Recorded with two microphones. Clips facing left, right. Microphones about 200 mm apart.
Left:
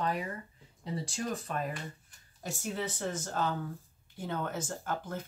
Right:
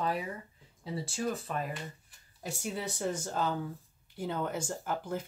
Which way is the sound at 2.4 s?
10° right (ahead or behind).